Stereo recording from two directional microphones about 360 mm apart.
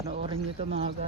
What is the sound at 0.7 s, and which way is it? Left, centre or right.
Speech, centre.